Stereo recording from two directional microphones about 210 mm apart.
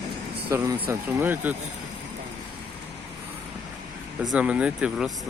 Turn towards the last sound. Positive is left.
turn(degrees=-5)  # may be behind; listen again after turning